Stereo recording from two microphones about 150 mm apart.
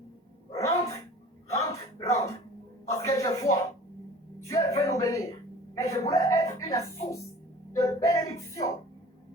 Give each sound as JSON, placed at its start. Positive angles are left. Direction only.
{"t": 0.5, "sound": "dog", "side_deg": 20}
{"t": 1.5, "sound": "a sound", "side_deg": 20}
{"t": 4.4, "sound": "music", "side_deg": 20}
{"t": 5.7, "sound": "a woman's voice", "side_deg": 20}
{"t": 7.7, "sound": "music", "side_deg": 20}